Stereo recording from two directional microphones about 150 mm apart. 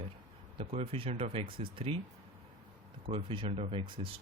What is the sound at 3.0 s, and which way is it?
Speech, 35° right (ahead or behind).